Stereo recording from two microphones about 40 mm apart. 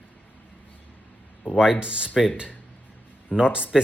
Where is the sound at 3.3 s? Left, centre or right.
Right.